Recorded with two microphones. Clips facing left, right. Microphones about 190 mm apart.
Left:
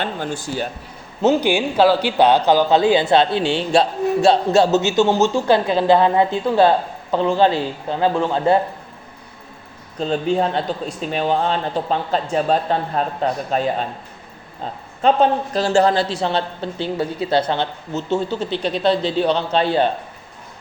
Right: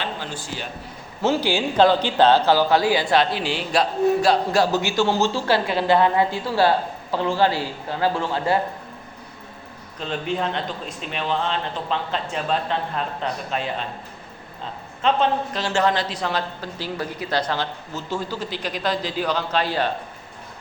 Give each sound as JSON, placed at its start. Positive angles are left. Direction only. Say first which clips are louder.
{"t": 0.0, "sound": "speech", "louder": "left 6 dB", "side_deg": 50}
{"t": 1.2, "sound": "speech", "louder": "left 5 dB", "side_deg": 20}
{"t": 1.7, "sound": "speech", "louder": "even", "side_deg": 5}
{"t": 10.0, "sound": "a man's voice", "louder": "left 7 dB", "side_deg": 35}